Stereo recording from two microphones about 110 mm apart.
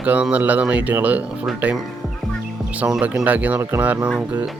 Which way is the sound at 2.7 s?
10° right (ahead or behind).